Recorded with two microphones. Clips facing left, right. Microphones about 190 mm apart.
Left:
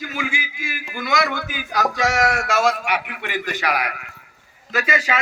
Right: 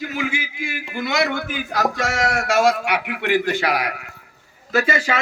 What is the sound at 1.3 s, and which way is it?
Speech, 55° right (ahead or behind).